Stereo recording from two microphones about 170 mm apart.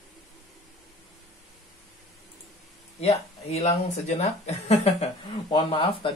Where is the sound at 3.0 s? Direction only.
40° left (ahead or behind).